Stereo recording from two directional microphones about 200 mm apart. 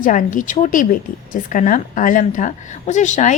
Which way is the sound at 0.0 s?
40° left (ahead or behind).